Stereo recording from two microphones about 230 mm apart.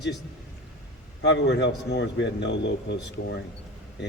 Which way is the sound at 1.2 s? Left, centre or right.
Left.